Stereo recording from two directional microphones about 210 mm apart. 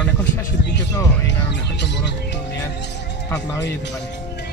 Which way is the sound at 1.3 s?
55° left (ahead or behind).